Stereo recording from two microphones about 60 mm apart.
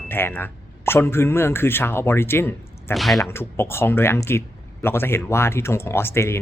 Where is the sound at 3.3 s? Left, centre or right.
Left.